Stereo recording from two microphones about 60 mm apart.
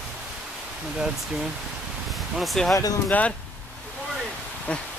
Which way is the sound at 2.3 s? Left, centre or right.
Centre.